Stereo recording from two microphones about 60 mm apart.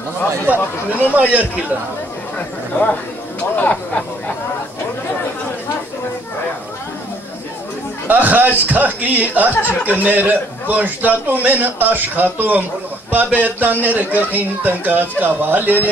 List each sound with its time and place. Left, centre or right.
0.5 s a man's voice: right
2.3 s speech: left
3.5 s a sound: left
8.1 s a man's voice: right